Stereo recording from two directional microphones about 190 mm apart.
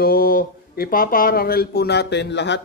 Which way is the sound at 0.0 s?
50° left (ahead or behind).